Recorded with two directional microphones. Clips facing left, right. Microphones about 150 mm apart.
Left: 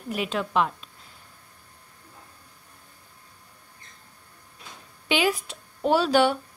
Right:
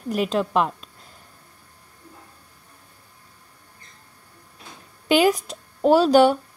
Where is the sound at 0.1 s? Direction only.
40° right (ahead or behind).